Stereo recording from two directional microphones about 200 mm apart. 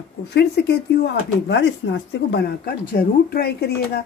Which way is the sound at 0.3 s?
55° left (ahead or behind).